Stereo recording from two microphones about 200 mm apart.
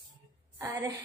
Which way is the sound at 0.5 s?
10° right (ahead or behind).